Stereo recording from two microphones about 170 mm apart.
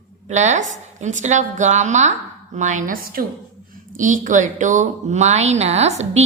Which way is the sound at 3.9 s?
50° right (ahead or behind).